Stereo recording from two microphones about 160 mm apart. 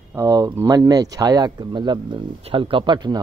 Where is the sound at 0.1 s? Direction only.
20° right (ahead or behind).